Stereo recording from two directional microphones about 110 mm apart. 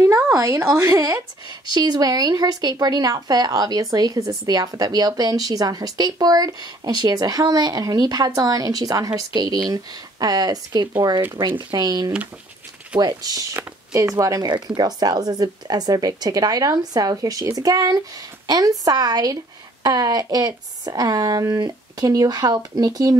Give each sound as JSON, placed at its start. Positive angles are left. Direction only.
{"t": 0.4, "sound": "speech", "side_deg": -25}
{"t": 11.3, "sound": "speech", "side_deg": -40}
{"t": 14.5, "sound": "speech", "side_deg": -40}